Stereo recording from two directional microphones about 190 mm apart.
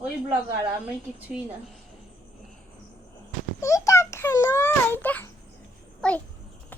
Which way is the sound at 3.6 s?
15° left (ahead or behind).